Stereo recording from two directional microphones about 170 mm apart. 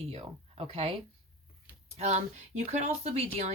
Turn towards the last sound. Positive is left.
turn(degrees=-35)  # may be behind; listen again after turning